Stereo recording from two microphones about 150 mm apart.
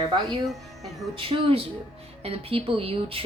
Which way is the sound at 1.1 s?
35° right (ahead or behind).